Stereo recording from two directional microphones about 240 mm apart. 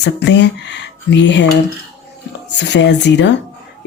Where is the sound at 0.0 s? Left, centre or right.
Left.